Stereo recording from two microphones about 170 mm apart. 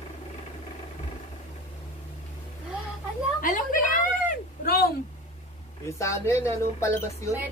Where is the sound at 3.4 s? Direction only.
50° left (ahead or behind).